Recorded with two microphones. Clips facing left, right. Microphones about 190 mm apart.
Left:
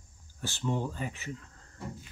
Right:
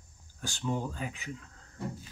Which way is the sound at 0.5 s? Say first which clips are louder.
Left 1 dB; 5° right (ahead or behind).